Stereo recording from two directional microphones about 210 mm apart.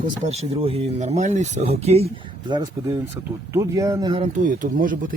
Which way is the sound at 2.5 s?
20° right (ahead or behind).